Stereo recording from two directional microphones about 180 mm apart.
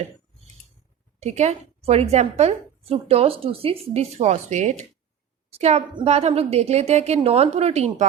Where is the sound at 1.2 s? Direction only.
40° right (ahead or behind).